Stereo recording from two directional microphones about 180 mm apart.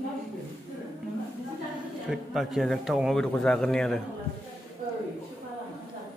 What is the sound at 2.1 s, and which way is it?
A man's voice, centre (ahead or behind).